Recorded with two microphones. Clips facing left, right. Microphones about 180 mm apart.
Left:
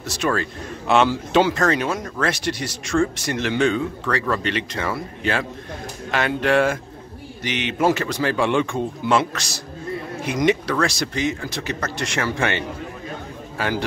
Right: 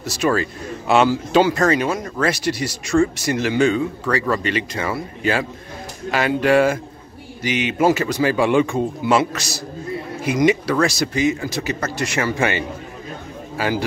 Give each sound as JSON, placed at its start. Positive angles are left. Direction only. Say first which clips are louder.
{"t": 0.0, "sound": "a man's voice", "louder": "right 3 dB", "side_deg": -5}